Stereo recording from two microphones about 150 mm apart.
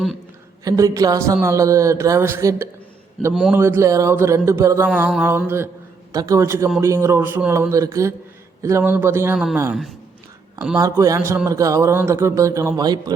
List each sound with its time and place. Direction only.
0.6 s a man's voice: 20° right (ahead or behind)
3.3 s a man's voice: 5° right (ahead or behind)
3.6 s a man's voice: 15° right (ahead or behind)
10.8 s a man's voice: 20° right (ahead or behind)